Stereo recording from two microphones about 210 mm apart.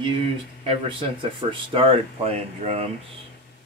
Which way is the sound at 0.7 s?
25° right (ahead or behind).